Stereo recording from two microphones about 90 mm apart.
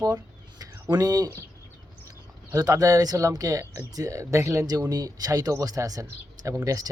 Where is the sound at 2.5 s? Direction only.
40° right (ahead or behind).